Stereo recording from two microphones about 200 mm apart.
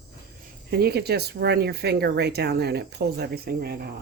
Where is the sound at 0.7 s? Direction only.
50° right (ahead or behind).